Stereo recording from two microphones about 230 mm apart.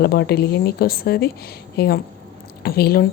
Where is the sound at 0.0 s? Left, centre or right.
Left.